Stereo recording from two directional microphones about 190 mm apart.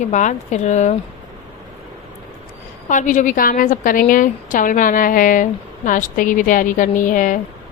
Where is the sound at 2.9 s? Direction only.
40° left (ahead or behind).